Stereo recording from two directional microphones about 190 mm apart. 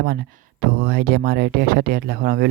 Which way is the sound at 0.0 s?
55° right (ahead or behind).